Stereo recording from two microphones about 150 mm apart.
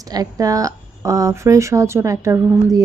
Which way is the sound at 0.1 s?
25° right (ahead or behind).